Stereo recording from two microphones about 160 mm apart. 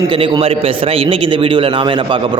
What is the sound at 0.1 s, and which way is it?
A man's voice, 30° right (ahead or behind).